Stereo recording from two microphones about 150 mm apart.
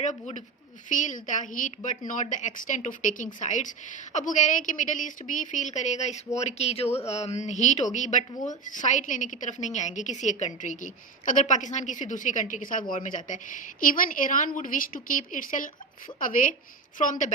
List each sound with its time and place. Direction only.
0.0 s a woman's voice: 50° left (ahead or behind)